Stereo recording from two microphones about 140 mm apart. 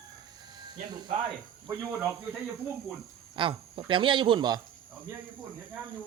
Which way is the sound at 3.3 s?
40° right (ahead or behind).